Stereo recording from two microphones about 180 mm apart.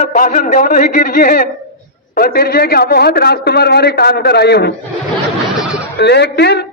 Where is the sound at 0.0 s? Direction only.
45° left (ahead or behind); by 4.7 s 65° left (ahead or behind).